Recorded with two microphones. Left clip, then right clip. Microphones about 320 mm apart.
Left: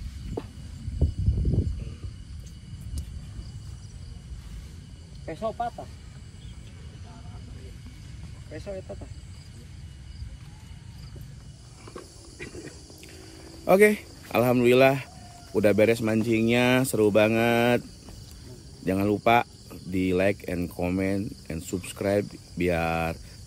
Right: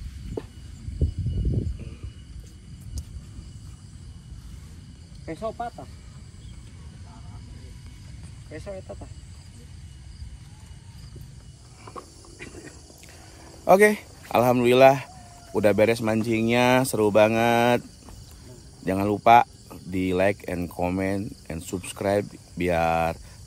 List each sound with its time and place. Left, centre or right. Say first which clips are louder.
5.2 s speech: even; right
12.4 s cricket: left 2 dB; right
13.7 s speech: right 2 dB; centre
18.9 s speech: right 4 dB; centre